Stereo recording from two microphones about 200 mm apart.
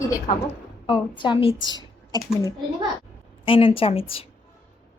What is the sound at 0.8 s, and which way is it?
Speech, 25° left (ahead or behind).